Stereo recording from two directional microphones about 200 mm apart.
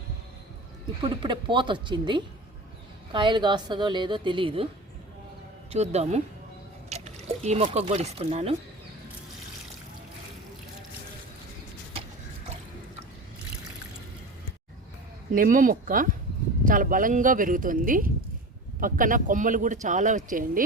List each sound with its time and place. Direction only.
1.0 s a woman's voice: 25° right (ahead or behind)
5.7 s a man's voice: 35° right (ahead or behind)
15.3 s a man's voice: 45° right (ahead or behind)